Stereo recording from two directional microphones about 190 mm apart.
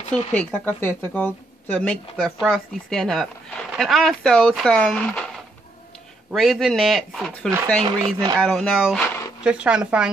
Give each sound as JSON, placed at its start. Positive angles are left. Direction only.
{"t": 0.1, "sound": "a woman's voice", "side_deg": 5}
{"t": 6.3, "sound": "speech", "side_deg": 0}
{"t": 7.8, "sound": "speech", "side_deg": -25}
{"t": 8.4, "sound": "speech", "side_deg": 0}